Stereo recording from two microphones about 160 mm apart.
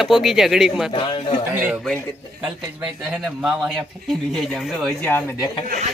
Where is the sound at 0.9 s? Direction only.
30° left (ahead or behind).